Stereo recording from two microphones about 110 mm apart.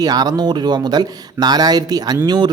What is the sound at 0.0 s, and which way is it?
A man's voice, 35° right (ahead or behind).